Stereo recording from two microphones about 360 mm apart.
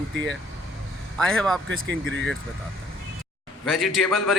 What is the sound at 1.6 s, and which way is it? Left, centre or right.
Speech, right.